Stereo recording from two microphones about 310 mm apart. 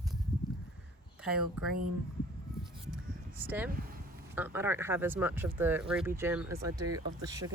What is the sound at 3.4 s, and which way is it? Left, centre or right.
Speech, centre.